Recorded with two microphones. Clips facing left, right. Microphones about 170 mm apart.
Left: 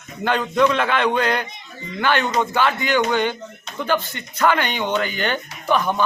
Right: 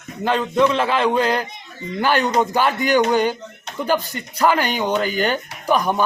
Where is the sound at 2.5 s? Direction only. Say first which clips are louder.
Right 2 dB; 40° right (ahead or behind).